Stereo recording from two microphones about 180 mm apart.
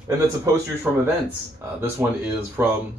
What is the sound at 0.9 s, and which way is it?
Speech, 10° right (ahead or behind).